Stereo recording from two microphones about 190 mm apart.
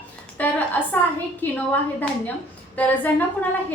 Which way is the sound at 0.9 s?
10° left (ahead or behind).